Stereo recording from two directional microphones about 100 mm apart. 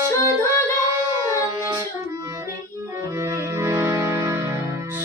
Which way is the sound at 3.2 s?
30° right (ahead or behind).